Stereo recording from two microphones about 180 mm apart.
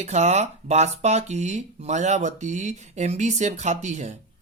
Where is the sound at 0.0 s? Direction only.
40° right (ahead or behind).